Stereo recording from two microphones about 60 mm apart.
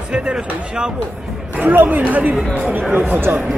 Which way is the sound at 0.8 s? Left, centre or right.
Centre.